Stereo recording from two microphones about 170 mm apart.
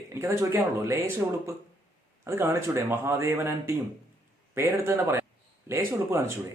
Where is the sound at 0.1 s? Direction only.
15° right (ahead or behind).